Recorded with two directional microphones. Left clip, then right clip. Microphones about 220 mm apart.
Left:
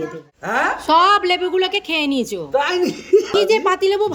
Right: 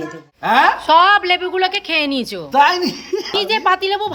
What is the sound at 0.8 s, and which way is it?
A woman's voice, centre (ahead or behind).